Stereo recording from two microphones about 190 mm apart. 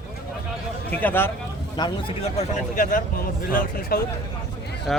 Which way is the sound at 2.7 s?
45° left (ahead or behind).